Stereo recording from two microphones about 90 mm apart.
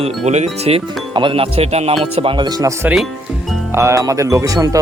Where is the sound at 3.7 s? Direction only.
30° right (ahead or behind).